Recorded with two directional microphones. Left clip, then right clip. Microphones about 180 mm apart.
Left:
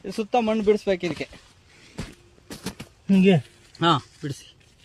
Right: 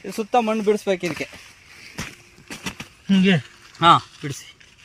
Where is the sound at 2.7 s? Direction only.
35° left (ahead or behind).